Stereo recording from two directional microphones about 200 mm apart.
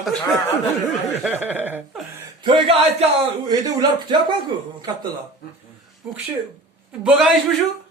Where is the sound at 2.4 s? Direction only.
25° right (ahead or behind).